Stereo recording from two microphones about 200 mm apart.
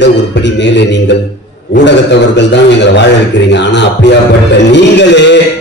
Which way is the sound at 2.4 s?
60° left (ahead or behind).